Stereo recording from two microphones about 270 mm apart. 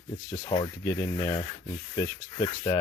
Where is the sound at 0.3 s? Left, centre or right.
Centre.